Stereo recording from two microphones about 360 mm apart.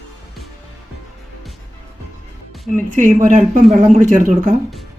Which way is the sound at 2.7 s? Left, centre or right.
Right.